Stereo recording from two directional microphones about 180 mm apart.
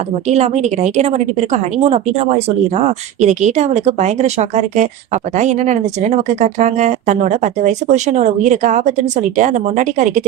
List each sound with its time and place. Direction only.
0.3 s speech: 35° right (ahead or behind)